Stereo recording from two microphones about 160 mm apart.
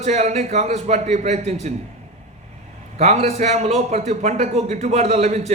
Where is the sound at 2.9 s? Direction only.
45° right (ahead or behind).